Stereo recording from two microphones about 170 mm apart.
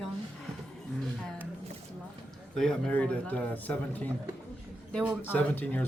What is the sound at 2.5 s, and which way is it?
Speech, 5° left (ahead or behind).